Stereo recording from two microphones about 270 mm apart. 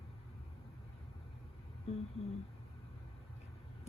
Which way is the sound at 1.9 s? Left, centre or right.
Left.